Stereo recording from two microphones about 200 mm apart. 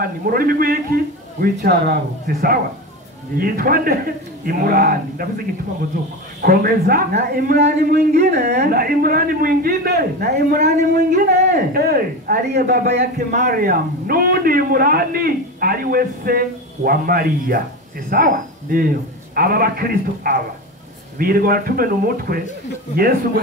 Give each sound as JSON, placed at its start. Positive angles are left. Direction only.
{"t": 0.0, "sound": "a man's voice", "side_deg": -45}
{"t": 6.4, "sound": "a man's voice", "side_deg": -50}